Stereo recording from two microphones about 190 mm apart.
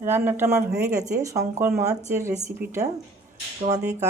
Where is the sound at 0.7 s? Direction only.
55° right (ahead or behind).